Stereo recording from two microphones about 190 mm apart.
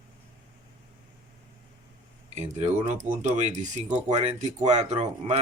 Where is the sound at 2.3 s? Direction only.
35° right (ahead or behind).